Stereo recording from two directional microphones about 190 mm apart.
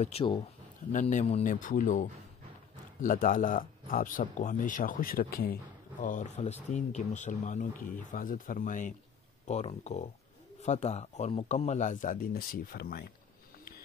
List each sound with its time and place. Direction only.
0.0 s speech: 30° left (ahead or behind); by 13.1 s 55° left (ahead or behind)